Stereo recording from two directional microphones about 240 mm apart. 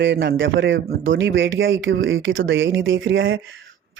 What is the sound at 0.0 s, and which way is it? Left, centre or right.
Speech, right.